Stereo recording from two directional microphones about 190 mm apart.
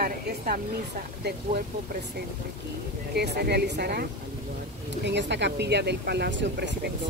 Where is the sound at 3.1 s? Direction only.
60° right (ahead or behind).